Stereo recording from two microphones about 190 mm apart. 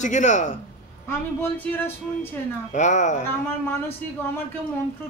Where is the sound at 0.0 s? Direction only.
40° left (ahead or behind).